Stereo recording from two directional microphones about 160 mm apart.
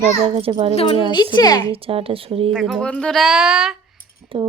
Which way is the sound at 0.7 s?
40° left (ahead or behind).